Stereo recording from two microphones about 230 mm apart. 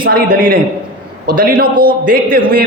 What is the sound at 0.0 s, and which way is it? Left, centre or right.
A man's voice, right.